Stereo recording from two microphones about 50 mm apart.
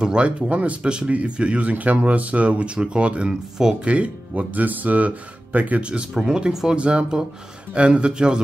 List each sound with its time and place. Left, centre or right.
0.0 s speech: centre
3.8 s speech: right